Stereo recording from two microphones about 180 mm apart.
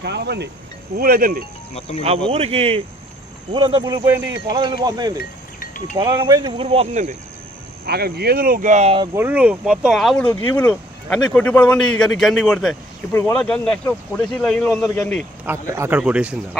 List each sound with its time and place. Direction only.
0.0 s speech: 70° right (ahead or behind)
0.9 s speech: 55° right (ahead or behind)
2.0 s speech: 35° right (ahead or behind)
6.7 s speech: 40° right (ahead or behind)
7.9 s speech: 60° right (ahead or behind); by 9.0 s 40° right (ahead or behind)
9.1 s speech: 10° right (ahead or behind); by 15.3 s 10° left (ahead or behind)
15.4 s speech: 15° right (ahead or behind)